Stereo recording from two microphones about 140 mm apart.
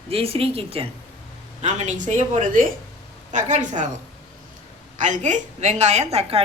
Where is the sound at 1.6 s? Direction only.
60° right (ahead or behind).